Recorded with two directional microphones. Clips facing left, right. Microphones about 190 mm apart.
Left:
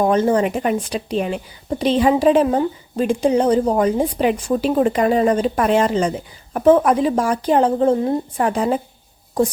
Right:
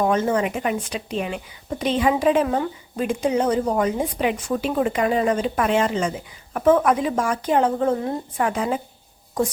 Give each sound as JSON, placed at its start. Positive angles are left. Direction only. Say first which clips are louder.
{"t": 0.0, "sound": "a woman's voice", "louder": "left 4 dB", "side_deg": 30}